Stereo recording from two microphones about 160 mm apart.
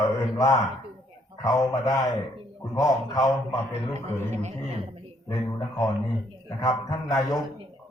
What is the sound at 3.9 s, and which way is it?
Speech, 45° right (ahead or behind).